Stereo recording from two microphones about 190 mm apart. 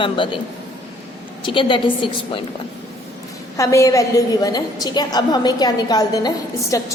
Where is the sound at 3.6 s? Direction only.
15° left (ahead or behind).